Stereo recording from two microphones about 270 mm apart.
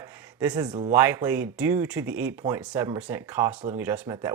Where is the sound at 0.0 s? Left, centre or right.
Centre.